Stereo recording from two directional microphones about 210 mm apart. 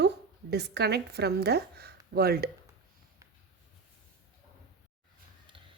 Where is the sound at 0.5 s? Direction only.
50° right (ahead or behind).